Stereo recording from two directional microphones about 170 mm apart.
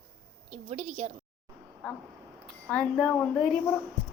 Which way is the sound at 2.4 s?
5° left (ahead or behind).